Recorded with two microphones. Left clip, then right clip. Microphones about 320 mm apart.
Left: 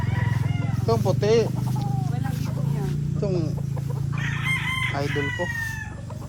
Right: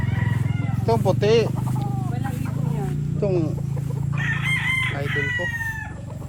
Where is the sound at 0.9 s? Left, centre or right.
Right.